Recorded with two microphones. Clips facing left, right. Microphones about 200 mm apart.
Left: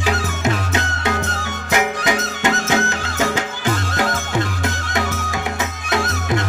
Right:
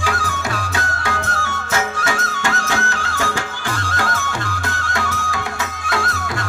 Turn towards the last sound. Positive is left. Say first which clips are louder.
# left 3 dB
turn(degrees=20)  # may be behind; listen again after turning